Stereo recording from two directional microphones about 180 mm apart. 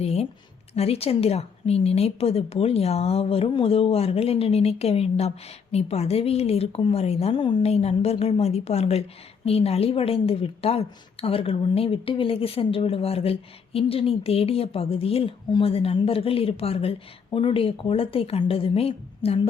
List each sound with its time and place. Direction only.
0.0 s speech: 35° left (ahead or behind)